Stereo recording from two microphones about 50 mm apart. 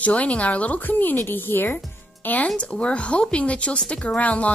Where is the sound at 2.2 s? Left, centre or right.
Left.